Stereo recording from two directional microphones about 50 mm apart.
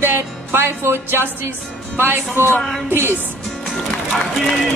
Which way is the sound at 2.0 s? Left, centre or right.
Right.